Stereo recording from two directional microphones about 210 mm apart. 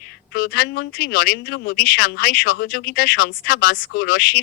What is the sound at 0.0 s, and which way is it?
Speech, 50° left (ahead or behind).